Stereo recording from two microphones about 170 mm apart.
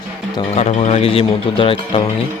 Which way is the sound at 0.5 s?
40° left (ahead or behind).